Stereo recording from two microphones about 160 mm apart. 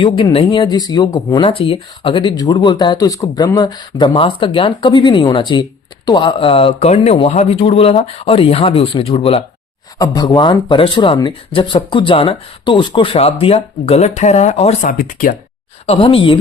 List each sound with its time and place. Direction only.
0.0 s speech: 30° left (ahead or behind)
10.0 s speech: 25° left (ahead or behind); by 14.8 s 45° left (ahead or behind)
14.8 s speech: 60° left (ahead or behind)
15.9 s speech: 35° left (ahead or behind)